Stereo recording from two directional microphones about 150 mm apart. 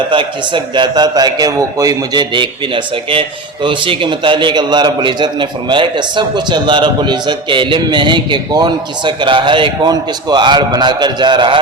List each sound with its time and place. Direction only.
0.1 s a man's voice: 35° right (ahead or behind)